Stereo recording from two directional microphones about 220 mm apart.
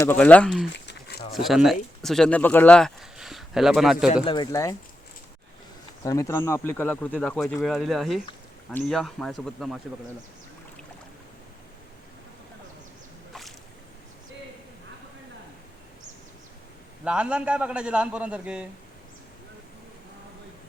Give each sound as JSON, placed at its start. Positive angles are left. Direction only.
{"t": 0.0, "sound": "speech", "side_deg": 10}
{"t": 4.1, "sound": "speech", "side_deg": 20}
{"t": 6.0, "sound": "a man's voice", "side_deg": 15}
{"t": 17.0, "sound": "a man's voice", "side_deg": -5}